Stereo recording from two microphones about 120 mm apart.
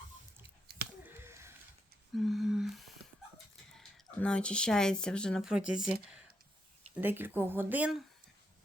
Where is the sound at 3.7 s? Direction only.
10° left (ahead or behind).